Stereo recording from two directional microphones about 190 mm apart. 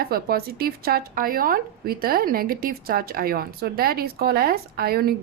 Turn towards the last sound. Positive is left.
turn(degrees=-55)  # may be behind; listen again after turning